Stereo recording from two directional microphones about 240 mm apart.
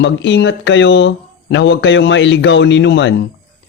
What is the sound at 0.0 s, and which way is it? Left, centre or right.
Speech, left.